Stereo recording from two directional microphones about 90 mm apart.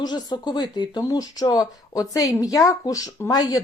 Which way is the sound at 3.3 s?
45° left (ahead or behind).